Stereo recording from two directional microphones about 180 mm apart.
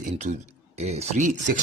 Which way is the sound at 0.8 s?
35° right (ahead or behind).